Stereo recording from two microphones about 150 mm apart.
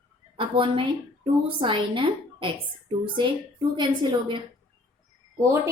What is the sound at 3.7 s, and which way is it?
Speech, 30° right (ahead or behind).